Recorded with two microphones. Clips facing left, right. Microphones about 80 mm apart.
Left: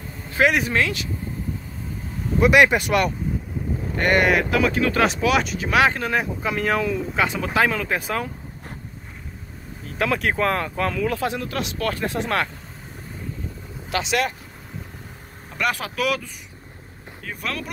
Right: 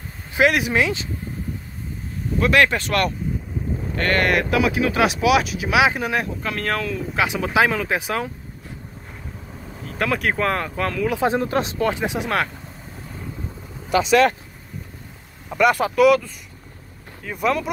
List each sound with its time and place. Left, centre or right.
0.4 s speech: centre
2.4 s speech: centre
4.3 s speech: centre
6.4 s speech: centre
7.2 s speech: centre
9.9 s speech: centre
11.1 s speech: right
11.9 s speech: centre
15.5 s speech: centre
17.3 s speech: centre